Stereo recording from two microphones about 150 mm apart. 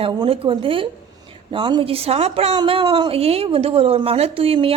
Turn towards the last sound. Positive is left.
turn(degrees=-40)  # may be behind; listen again after turning